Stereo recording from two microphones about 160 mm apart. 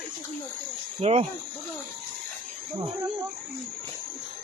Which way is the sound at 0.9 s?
40° right (ahead or behind).